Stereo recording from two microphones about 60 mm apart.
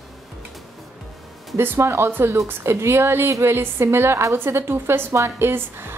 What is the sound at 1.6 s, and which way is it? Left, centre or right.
A woman's voice, right.